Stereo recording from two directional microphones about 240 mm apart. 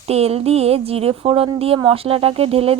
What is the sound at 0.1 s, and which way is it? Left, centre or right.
Speech, right.